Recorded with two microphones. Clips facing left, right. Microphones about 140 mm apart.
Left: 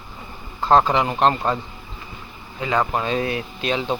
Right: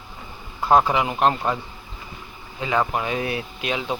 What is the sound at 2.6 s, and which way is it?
Speech, 15° right (ahead or behind).